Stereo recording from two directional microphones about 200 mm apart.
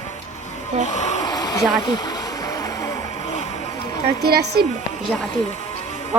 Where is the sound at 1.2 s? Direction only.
20° left (ahead or behind).